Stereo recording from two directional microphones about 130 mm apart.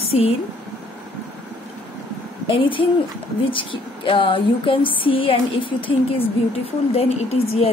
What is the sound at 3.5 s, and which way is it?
Speech, 40° left (ahead or behind).